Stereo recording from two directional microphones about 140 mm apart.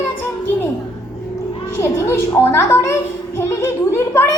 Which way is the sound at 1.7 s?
20° left (ahead or behind).